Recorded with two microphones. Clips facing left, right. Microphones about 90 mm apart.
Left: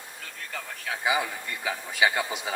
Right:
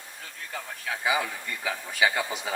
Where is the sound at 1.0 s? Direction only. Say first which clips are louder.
Left 1 dB; 15° left (ahead or behind).